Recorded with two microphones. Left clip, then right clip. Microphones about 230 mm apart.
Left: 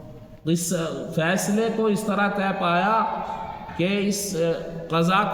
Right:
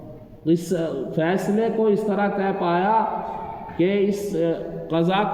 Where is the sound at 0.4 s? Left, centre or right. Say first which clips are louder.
Right 4 dB; left.